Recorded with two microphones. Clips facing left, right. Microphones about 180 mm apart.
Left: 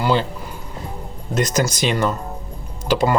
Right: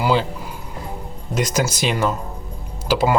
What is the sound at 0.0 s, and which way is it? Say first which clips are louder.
Speech: even; 10° right (ahead or behind).